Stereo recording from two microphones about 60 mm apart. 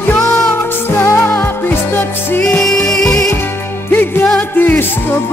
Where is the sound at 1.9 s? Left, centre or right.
Left.